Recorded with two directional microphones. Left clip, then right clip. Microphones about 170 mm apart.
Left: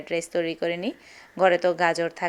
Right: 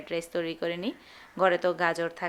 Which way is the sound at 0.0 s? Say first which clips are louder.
Left 5 dB; 20° left (ahead or behind).